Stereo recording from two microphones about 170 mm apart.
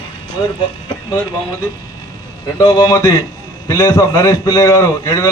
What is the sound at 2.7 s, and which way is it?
A man's voice, 25° left (ahead or behind).